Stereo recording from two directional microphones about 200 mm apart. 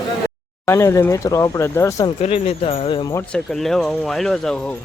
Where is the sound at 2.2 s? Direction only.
30° left (ahead or behind).